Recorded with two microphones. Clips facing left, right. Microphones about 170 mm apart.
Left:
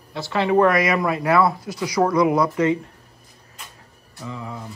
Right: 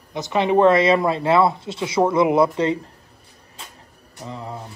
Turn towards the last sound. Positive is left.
turn(degrees=-35)  # may be behind; listen again after turning